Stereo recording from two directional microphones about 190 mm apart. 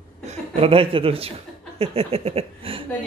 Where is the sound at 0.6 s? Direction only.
30° right (ahead or behind).